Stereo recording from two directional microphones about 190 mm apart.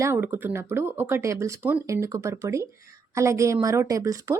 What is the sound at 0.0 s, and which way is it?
A woman's voice, 15° right (ahead or behind).